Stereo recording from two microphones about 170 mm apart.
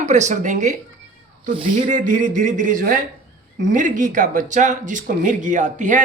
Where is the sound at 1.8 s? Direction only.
50° right (ahead or behind).